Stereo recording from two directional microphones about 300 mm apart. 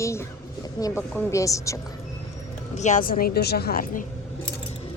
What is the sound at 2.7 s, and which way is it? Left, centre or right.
Speech, left.